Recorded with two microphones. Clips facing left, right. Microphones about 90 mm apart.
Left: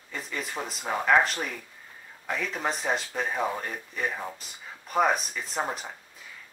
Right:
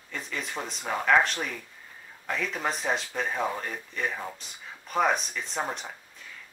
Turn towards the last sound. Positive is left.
turn(degrees=5)  # may be behind; listen again after turning